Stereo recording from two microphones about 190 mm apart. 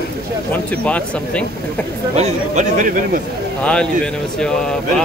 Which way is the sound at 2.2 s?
35° right (ahead or behind).